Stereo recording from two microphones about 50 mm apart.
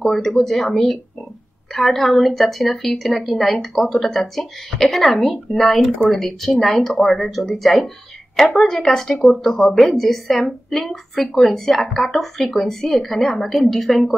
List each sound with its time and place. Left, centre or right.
0.0 s a woman's voice: centre